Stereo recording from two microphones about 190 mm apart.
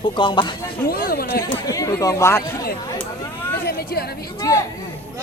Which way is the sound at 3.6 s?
55° left (ahead or behind).